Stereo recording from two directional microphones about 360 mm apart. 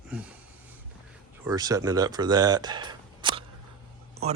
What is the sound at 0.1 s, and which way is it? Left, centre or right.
Speech, centre.